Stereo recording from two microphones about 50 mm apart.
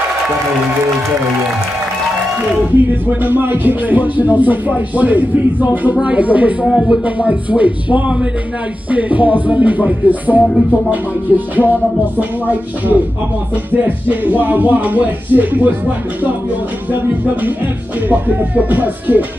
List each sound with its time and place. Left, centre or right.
3.2 s speech: right
6.6 s speech: centre
7.2 s speech: right
18.0 s speech: right